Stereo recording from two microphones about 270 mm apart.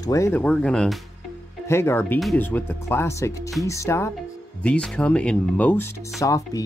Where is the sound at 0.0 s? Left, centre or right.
Centre.